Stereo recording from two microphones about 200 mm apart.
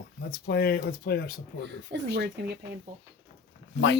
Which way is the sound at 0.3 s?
50° left (ahead or behind).